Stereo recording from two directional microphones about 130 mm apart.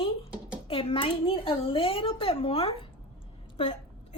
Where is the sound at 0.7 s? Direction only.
45° left (ahead or behind).